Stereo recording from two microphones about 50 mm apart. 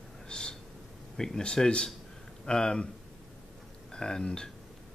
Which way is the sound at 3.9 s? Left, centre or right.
Centre.